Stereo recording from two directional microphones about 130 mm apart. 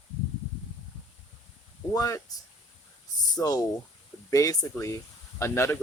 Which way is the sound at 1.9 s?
25° left (ahead or behind).